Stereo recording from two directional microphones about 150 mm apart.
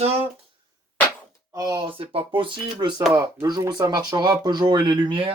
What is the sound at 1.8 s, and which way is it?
Speech, 35° right (ahead or behind).